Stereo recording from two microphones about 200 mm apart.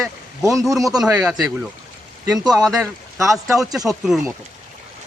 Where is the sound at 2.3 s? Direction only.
20° right (ahead or behind).